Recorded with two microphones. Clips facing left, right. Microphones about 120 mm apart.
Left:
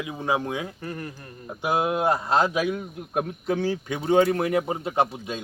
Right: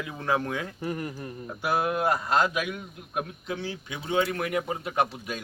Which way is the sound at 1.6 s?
20° left (ahead or behind).